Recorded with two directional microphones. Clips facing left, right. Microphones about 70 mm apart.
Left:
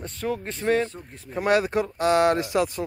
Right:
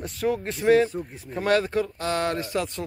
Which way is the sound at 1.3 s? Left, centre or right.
Centre.